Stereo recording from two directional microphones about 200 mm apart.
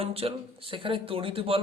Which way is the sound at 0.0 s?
30° right (ahead or behind).